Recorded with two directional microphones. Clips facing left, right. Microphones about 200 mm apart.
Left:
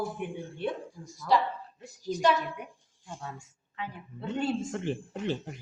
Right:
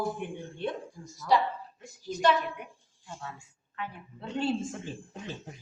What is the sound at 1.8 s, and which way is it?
Speech, 35° left (ahead or behind).